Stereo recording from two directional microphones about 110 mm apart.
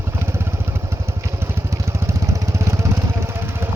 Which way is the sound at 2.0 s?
25° right (ahead or behind).